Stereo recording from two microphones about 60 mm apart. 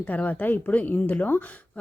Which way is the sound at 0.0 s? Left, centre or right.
Left.